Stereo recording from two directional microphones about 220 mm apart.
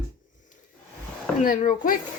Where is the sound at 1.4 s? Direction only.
40° left (ahead or behind).